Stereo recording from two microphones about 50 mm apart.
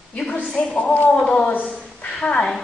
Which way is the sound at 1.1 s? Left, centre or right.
Centre.